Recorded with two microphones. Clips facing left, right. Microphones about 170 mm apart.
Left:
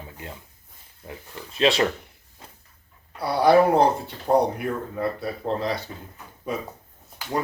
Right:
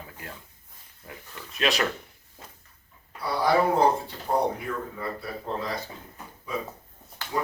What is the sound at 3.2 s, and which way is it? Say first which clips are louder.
Speech: left 6 dB; 70° left (ahead or behind).